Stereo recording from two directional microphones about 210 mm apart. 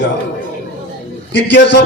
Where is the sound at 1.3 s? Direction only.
55° left (ahead or behind).